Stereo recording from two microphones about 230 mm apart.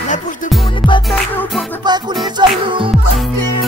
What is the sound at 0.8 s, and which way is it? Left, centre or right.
Music, left.